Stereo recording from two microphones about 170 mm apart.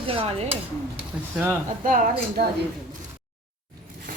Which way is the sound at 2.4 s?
65° right (ahead or behind).